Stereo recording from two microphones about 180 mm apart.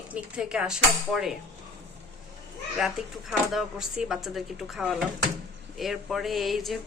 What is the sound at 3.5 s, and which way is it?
Speech, 5° right (ahead or behind).